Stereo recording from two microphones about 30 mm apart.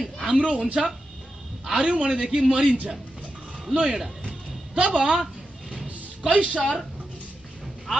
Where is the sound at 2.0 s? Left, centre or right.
Right.